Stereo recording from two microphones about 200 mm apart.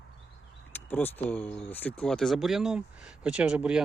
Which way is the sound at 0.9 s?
10° left (ahead or behind).